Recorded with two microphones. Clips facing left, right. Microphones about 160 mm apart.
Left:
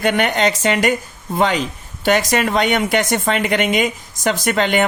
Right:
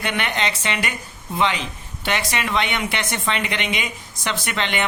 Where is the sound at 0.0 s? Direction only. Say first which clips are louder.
Left 8 dB; 45° left (ahead or behind).